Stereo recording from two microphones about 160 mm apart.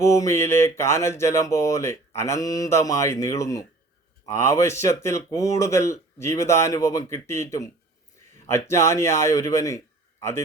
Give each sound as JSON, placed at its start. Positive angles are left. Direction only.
{"t": 0.0, "sound": "a man's voice", "side_deg": 20}